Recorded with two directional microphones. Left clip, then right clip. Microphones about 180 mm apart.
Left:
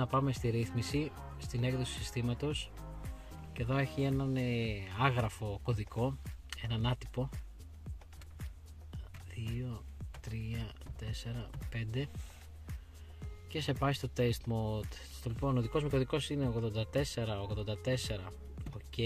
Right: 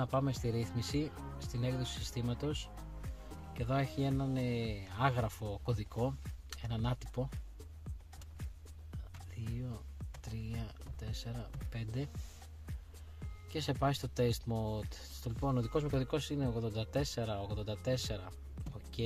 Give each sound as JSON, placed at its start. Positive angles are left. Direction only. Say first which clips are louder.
{"t": 0.0, "sound": "speech", "louder": "left 2 dB", "side_deg": 20}
{"t": 9.4, "sound": "speech", "louder": "left 3 dB", "side_deg": 10}
{"t": 13.5, "sound": "speech", "louder": "even", "side_deg": 10}